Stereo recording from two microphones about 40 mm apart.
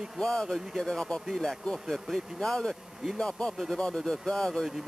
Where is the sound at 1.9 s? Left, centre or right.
Centre.